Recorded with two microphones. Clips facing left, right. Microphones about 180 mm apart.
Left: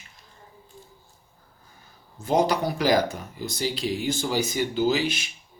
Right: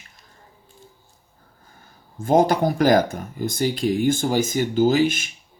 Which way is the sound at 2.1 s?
50° right (ahead or behind).